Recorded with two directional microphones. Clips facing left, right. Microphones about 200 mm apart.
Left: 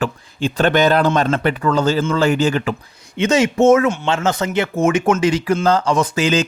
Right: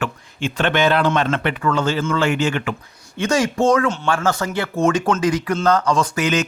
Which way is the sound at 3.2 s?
20° left (ahead or behind).